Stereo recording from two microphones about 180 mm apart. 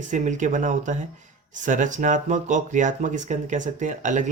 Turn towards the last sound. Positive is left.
turn(degrees=-45)  # may be behind; listen again after turning